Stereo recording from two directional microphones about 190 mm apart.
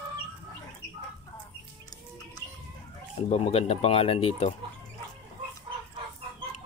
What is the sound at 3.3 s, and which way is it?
Speech, 30° left (ahead or behind).